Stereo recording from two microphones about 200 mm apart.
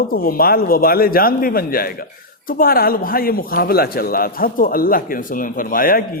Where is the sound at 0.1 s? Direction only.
45° left (ahead or behind).